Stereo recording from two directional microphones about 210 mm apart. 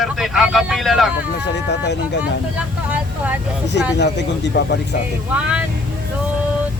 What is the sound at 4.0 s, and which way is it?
Speech, 55° left (ahead or behind).